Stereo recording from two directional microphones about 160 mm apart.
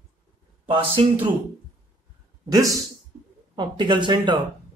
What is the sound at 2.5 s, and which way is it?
Speech, 20° right (ahead or behind).